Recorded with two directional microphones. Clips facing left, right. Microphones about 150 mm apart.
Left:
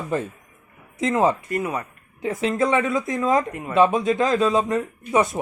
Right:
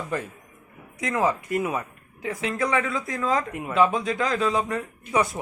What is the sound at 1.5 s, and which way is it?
Speech, 10° right (ahead or behind).